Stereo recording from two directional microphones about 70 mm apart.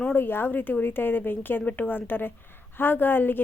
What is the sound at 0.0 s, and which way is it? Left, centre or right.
Speech, left.